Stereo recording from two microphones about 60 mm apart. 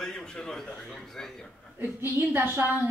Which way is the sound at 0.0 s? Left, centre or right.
Centre.